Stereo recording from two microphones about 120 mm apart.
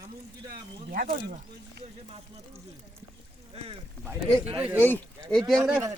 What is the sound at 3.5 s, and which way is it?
Speech, 55° right (ahead or behind).